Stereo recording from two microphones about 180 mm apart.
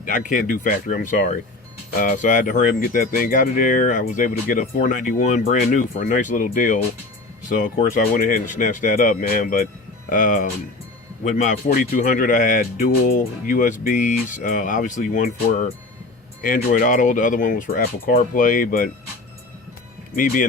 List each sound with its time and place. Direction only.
0.0 s speech: 45° left (ahead or behind)
20.1 s speech: 55° left (ahead or behind)